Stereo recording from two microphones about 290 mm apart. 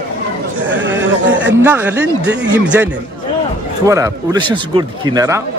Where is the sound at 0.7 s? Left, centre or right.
Right.